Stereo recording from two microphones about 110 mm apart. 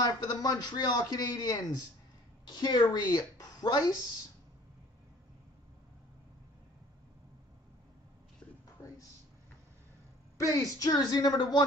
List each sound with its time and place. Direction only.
0.0 s a man's voice: 35° left (ahead or behind)
10.3 s a man's voice: 30° left (ahead or behind)